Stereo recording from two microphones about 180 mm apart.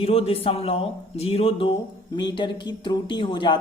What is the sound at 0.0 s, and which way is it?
Speech, 35° left (ahead or behind).